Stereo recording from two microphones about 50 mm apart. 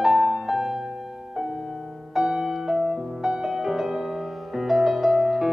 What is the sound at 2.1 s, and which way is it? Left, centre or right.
Music, centre.